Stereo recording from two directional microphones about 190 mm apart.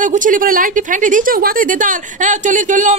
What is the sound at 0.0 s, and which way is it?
A woman's voice, 40° right (ahead or behind).